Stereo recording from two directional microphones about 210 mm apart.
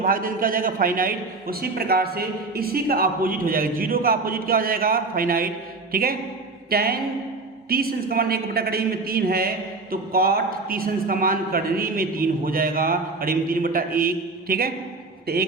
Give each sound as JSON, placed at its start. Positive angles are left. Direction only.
{"t": 0.0, "sound": "a woman's voice", "side_deg": -40}